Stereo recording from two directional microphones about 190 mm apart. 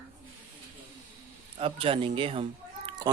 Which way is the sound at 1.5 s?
30° right (ahead or behind).